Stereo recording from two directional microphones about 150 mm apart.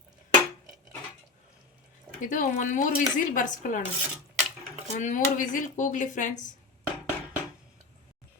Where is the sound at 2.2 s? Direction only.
60° left (ahead or behind).